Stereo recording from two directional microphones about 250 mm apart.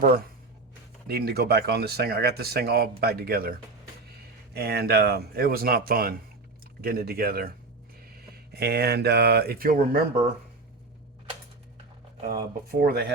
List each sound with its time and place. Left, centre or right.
1.0 s speech: right
4.5 s speech: right
8.5 s speech: right
12.3 s speech: right